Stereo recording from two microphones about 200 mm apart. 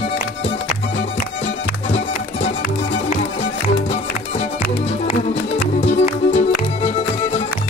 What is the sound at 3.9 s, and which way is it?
Music, 35° left (ahead or behind).